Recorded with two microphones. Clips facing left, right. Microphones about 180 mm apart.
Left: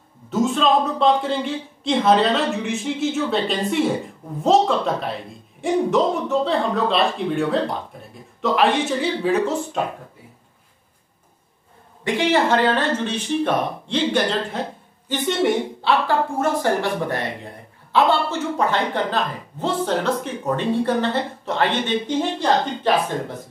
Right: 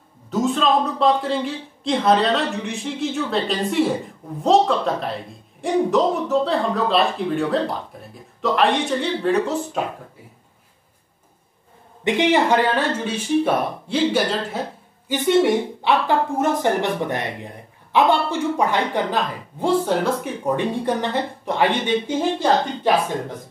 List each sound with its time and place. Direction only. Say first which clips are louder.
0.3 s a woman's voice: left 1 dB; centre (ahead or behind)
12.0 s speech: right 1 dB; 15° right (ahead or behind)
17.9 s speech: right 1 dB; 15° right (ahead or behind)